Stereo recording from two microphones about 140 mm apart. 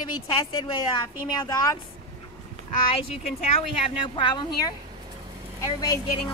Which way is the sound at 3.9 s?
35° left (ahead or behind).